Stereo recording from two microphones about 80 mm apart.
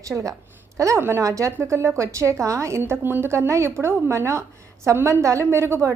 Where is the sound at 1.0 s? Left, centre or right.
Right.